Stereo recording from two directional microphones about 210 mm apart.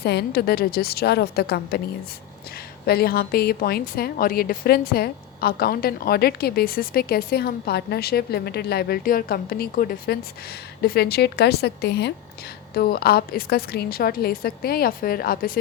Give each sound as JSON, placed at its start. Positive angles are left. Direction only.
{"t": 0.0, "sound": "a woman's voice", "side_deg": 50}
{"t": 2.8, "sound": "a woman's voice", "side_deg": 50}